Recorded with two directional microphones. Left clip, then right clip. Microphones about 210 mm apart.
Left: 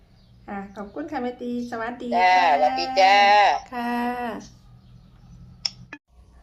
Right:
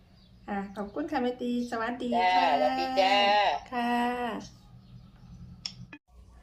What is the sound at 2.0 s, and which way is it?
Speech, 50° left (ahead or behind).